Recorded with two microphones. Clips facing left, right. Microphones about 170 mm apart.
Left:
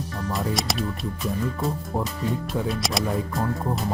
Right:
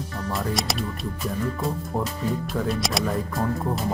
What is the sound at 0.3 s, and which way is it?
Speech, centre (ahead or behind).